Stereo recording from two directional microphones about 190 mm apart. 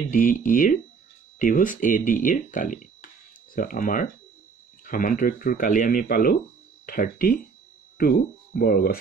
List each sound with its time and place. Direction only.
0.1 s speech: 45° left (ahead or behind)